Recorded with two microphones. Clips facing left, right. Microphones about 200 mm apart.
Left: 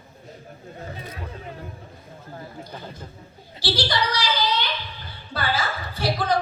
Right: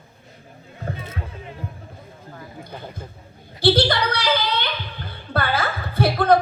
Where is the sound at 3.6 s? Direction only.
55° right (ahead or behind).